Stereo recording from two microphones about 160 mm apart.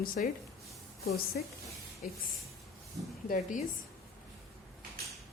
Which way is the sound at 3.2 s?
55° left (ahead or behind).